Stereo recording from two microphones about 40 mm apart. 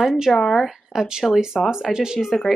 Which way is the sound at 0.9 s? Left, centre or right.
Centre.